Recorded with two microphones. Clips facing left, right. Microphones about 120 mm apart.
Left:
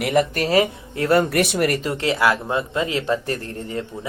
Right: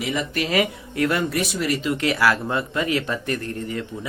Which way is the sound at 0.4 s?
30° left (ahead or behind).